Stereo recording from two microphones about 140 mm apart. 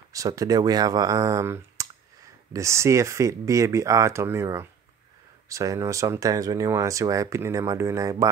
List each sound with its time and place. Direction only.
0.1 s speech: 25° right (ahead or behind)